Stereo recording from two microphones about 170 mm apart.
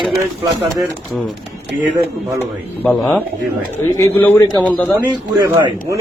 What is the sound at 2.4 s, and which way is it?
A man's voice, 10° left (ahead or behind).